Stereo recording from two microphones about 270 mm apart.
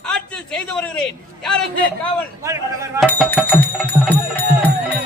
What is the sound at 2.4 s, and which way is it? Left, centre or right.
Speech, centre.